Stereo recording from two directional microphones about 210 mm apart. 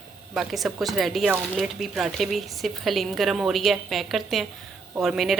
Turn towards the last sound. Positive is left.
turn(degrees=0)  # may be behind; listen again after turning